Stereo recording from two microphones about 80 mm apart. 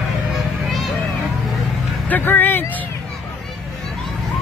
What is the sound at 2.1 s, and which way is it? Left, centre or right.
Speech, left.